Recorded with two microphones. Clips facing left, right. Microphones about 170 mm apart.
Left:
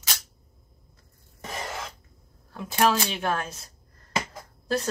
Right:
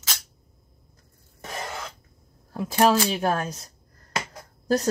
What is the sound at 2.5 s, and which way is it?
Speech, 35° right (ahead or behind).